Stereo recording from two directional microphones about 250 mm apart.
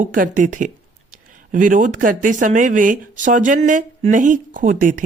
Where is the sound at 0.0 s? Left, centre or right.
Right.